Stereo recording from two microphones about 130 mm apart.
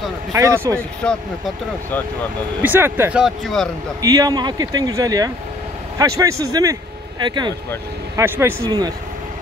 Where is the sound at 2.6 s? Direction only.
15° right (ahead or behind).